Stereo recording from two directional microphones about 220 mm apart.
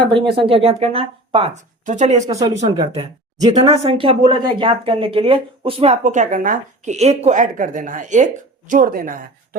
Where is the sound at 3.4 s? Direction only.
20° right (ahead or behind).